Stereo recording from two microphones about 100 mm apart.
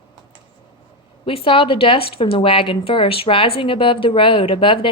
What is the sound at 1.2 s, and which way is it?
A woman's voice, 75° left (ahead or behind).